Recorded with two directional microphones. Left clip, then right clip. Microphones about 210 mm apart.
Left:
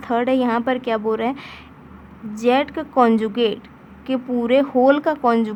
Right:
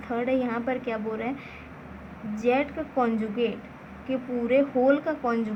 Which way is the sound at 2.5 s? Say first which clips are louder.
Left 7 dB; 45° left (ahead or behind).